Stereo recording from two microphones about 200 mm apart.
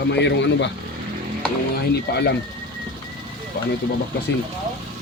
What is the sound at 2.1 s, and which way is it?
Speech, 55° left (ahead or behind).